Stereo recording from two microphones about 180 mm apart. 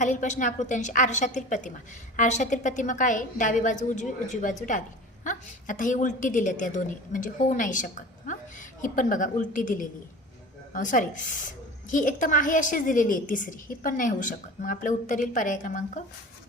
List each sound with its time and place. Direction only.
0.0 s a woman's voice: 45° left (ahead or behind)